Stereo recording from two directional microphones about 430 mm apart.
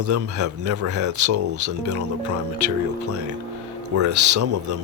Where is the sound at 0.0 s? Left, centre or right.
Right.